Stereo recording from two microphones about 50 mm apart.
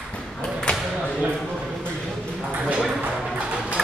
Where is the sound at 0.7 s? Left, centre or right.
Left.